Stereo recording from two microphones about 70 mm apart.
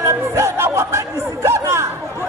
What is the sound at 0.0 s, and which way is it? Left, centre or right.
Chatter, right.